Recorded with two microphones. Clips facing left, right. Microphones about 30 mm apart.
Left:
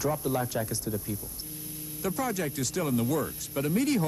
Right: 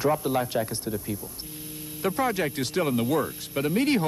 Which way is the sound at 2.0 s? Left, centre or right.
Right.